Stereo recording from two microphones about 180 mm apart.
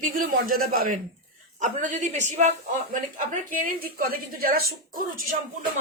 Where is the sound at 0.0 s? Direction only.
50° right (ahead or behind).